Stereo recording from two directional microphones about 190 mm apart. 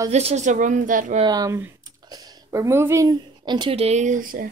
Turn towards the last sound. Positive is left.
turn(degrees=-45)  # may be behind; listen again after turning